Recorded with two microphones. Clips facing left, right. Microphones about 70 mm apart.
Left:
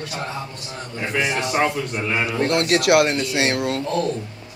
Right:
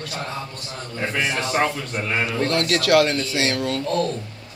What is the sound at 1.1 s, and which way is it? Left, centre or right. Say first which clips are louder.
A man's voice: left 2 dB; centre.